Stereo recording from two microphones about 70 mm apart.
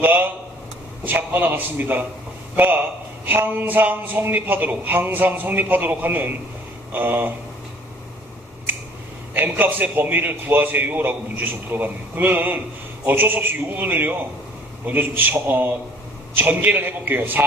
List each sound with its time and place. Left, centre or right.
0.0 s a man's voice: right
9.3 s a man's voice: right